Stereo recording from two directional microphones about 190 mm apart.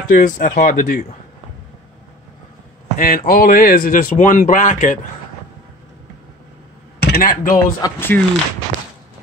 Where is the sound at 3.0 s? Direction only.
50° left (ahead or behind).